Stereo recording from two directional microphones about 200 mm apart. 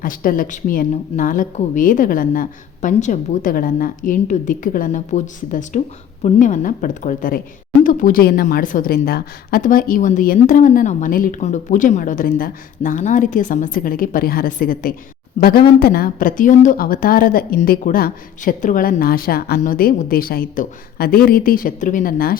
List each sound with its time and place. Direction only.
0.0 s a woman's voice: 45° left (ahead or behind)